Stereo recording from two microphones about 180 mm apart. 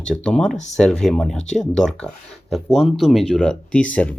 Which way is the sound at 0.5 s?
40° left (ahead or behind).